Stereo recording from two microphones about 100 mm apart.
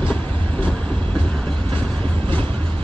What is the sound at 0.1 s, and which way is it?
Train, 10° left (ahead or behind).